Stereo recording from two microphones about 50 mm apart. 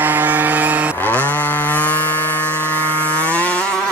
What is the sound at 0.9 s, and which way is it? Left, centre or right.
Chainsaw, left.